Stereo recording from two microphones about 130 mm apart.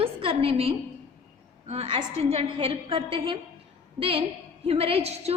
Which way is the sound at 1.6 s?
50° right (ahead or behind).